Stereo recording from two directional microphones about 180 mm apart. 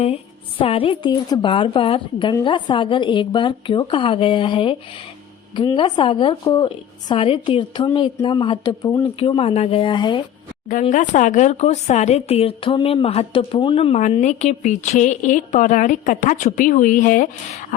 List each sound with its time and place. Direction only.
0.6 s a woman's voice: 30° left (ahead or behind)
9.0 s speech: 30° left (ahead or behind)
10.7 s speech: 45° left (ahead or behind)